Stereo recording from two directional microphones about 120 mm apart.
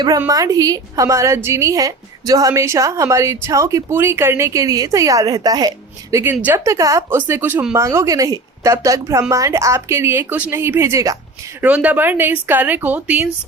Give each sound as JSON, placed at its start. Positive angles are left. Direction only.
{"t": 0.3, "sound": "a woman's voice", "side_deg": -30}
{"t": 11.6, "sound": "speech", "side_deg": -15}